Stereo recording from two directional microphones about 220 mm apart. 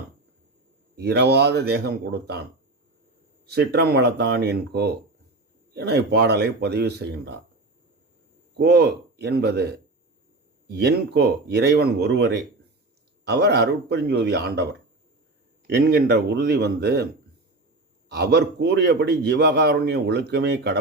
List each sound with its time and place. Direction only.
0.9 s a man's voice: 50° right (ahead or behind)
3.4 s a man's voice: 45° right (ahead or behind)
8.5 s a man's voice: 50° right (ahead or behind)
18.1 s a man's voice: 45° right (ahead or behind)